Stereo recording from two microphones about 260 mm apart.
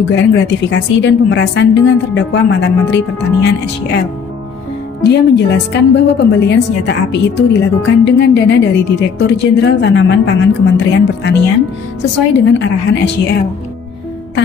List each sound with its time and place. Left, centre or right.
0.1 s a woman's voice: left
5.0 s a woman's voice: left